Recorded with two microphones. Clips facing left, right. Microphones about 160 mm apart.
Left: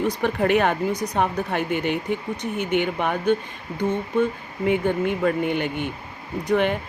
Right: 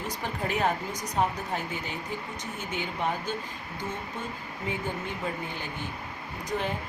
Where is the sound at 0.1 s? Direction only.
70° left (ahead or behind).